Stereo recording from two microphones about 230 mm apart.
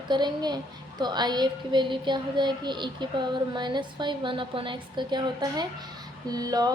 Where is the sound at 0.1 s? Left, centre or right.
Centre.